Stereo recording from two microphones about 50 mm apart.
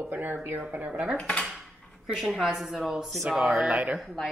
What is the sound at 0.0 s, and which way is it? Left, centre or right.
Speech, right.